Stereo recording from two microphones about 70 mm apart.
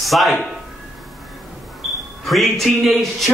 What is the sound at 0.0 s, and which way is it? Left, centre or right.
Speech, centre.